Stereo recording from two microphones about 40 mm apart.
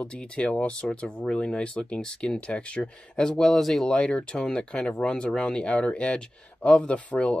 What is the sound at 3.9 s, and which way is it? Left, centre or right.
Speech, left.